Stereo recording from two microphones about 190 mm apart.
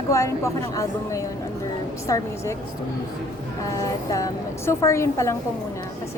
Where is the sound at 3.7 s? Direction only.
20° left (ahead or behind).